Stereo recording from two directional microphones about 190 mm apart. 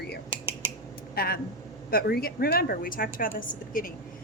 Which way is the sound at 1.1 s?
55° left (ahead or behind).